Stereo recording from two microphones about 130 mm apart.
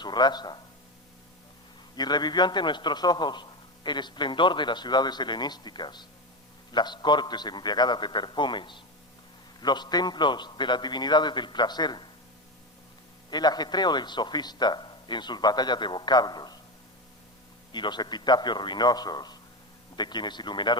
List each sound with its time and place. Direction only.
0.0 s a man's voice: 35° left (ahead or behind)
2.0 s a man's voice: 35° left (ahead or behind)
13.3 s a man's voice: 30° left (ahead or behind)
17.7 s a man's voice: 35° left (ahead or behind)